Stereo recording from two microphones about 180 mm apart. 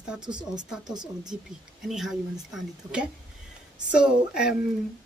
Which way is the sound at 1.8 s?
Centre (ahead or behind).